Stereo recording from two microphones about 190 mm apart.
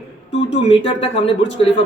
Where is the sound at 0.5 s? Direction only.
30° left (ahead or behind).